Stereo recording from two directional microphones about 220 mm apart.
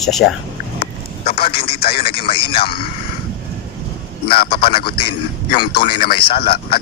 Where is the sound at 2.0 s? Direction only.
25° left (ahead or behind).